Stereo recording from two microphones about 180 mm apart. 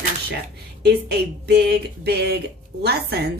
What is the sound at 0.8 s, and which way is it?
Speech, 65° right (ahead or behind).